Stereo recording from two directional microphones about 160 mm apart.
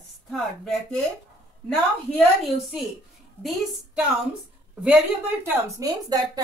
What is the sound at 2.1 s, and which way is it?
A woman's voice, centre (ahead or behind).